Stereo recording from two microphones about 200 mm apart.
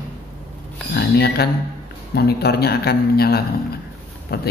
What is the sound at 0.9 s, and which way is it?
Speech, 55° left (ahead or behind).